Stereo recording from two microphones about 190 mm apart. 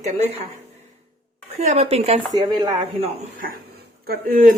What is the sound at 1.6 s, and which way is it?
Speech, 35° right (ahead or behind).